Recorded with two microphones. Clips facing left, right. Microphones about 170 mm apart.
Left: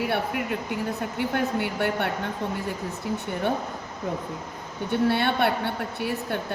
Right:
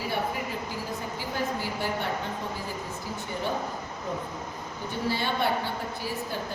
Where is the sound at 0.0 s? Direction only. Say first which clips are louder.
Left 4 dB; 65° left (ahead or behind).